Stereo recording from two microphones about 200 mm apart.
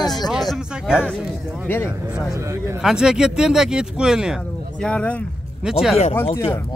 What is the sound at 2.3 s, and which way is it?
Speech, 15° right (ahead or behind).